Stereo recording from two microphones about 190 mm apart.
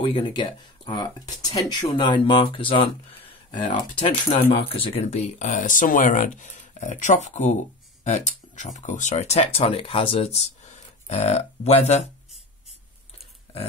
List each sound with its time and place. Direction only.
0.0 s speech: 25° left (ahead or behind)